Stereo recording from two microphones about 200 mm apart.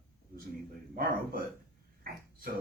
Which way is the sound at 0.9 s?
45° right (ahead or behind).